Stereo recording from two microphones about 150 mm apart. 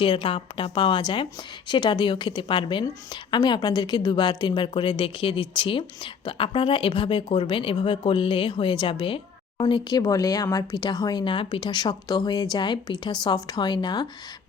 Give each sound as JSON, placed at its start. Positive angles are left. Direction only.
{"t": 0.0, "sound": "a woman's voice", "side_deg": 35}
{"t": 10.0, "sound": "speech", "side_deg": 20}